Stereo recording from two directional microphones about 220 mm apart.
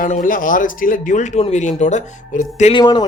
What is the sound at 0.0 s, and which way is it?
Speech, 40° left (ahead or behind).